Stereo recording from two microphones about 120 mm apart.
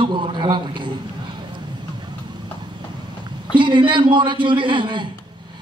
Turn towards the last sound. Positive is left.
turn(degrees=-40)  # may be behind; listen again after turning